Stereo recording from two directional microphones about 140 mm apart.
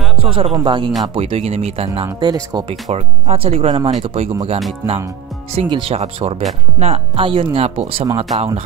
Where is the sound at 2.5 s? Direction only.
30° right (ahead or behind).